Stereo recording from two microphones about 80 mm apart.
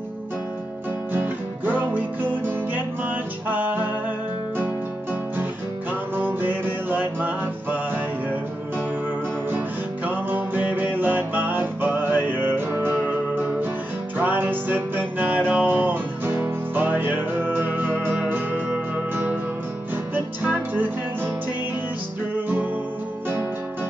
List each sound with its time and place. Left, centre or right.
1.1 s music: right
6.1 s music: right
10.0 s music: right
20.4 s music: right